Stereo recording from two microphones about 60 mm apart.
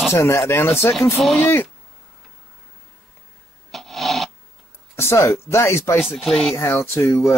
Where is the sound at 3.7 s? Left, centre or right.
Centre.